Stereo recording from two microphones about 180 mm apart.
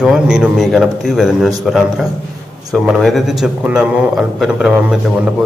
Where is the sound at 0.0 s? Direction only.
5° right (ahead or behind).